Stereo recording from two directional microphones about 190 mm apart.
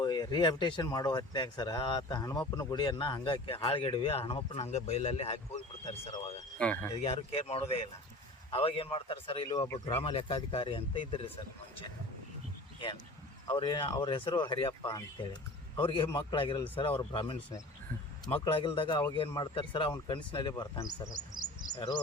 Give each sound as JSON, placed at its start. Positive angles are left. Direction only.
{"t": 0.0, "sound": "speech", "side_deg": 20}
{"t": 6.6, "sound": "speech", "side_deg": 10}
{"t": 7.0, "sound": "speech", "side_deg": 30}
{"t": 13.5, "sound": "speech", "side_deg": 25}